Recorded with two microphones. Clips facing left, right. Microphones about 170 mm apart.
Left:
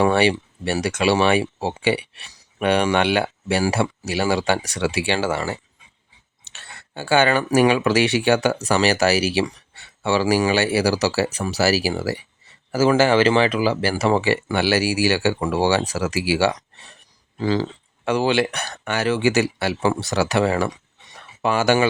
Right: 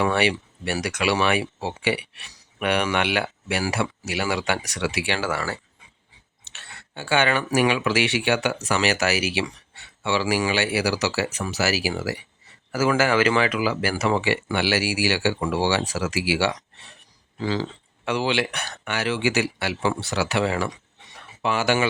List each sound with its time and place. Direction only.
0.0 s speech: 30° left (ahead or behind)
6.4 s speech: 40° left (ahead or behind)